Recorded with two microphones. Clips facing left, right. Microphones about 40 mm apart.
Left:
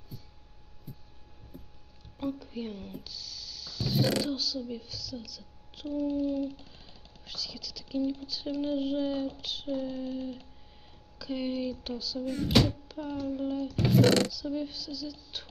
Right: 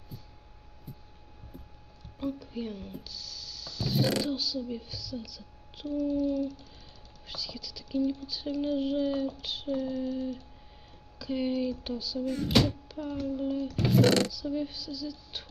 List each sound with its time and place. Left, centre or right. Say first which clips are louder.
0.9 s heart sounds: even; centre
1.5 s a sound: even; centre
2.1 s speech: even; centre
5.9 s child singing: right 1 dB; left
7.2 s speech: even; centre
9.9 s a sound: right 3 dB; centre
11.1 s speech: right 3 dB; centre